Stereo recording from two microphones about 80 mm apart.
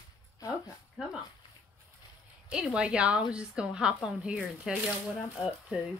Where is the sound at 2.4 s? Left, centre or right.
Centre.